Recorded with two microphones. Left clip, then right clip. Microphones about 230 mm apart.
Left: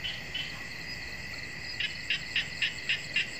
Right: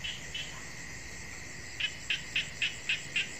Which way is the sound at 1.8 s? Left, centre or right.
Right.